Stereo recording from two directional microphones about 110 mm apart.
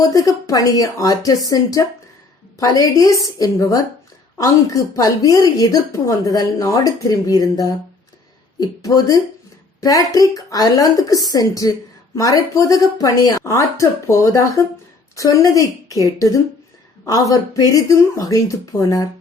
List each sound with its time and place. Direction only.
0.0 s speech: 30° left (ahead or behind)